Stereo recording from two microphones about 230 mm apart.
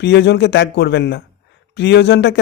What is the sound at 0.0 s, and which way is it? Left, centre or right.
A man's voice, left.